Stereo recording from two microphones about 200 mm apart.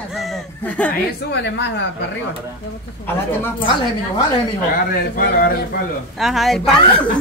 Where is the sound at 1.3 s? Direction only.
60° left (ahead or behind).